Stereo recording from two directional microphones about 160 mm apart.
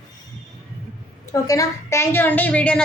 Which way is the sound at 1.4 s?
20° left (ahead or behind).